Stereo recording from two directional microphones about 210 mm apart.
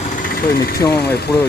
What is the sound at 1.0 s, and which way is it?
Speech, 50° left (ahead or behind).